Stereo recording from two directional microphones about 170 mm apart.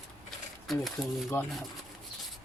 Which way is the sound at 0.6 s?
Centre (ahead or behind).